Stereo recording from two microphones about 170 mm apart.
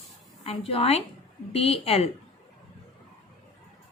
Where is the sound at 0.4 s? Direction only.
35° left (ahead or behind).